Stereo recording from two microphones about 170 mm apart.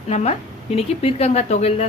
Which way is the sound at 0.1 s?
40° left (ahead or behind).